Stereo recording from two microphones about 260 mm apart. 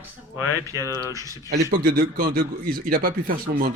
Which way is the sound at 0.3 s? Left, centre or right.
Left.